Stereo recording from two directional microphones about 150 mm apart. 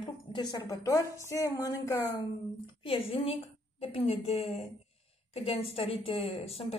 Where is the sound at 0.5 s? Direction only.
25° left (ahead or behind).